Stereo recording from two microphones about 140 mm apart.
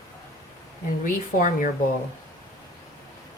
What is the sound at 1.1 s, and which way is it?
Speech, 70° left (ahead or behind).